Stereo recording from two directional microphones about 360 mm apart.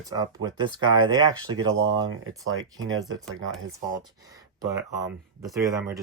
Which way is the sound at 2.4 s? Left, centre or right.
Right.